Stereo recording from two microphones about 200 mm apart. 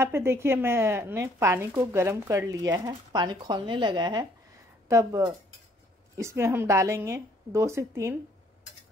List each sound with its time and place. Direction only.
0.0 s speech: 10° right (ahead or behind)